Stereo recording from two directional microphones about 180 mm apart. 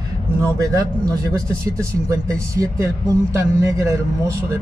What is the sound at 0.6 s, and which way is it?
A man's voice, 20° right (ahead or behind).